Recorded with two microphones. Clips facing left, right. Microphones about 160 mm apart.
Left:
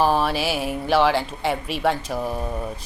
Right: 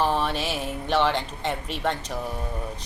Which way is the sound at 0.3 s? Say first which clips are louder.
Left 5 dB; 10° left (ahead or behind).